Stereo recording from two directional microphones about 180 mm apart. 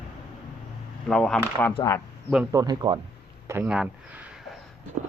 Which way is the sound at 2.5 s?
20° right (ahead or behind).